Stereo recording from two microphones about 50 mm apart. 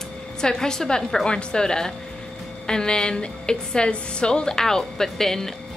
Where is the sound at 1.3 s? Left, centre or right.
Centre.